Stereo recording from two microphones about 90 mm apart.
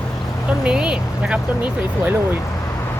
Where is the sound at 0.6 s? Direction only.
10° right (ahead or behind).